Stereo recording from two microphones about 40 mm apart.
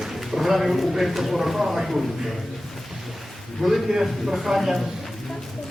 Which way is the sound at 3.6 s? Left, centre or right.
Centre.